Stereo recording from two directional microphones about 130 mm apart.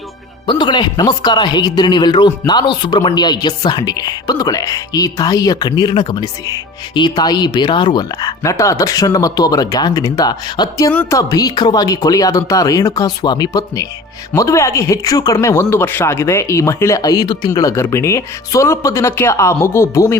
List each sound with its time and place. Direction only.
0.4 s speech: 35° left (ahead or behind)